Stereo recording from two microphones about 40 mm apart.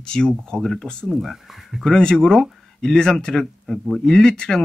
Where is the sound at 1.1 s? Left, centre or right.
Centre.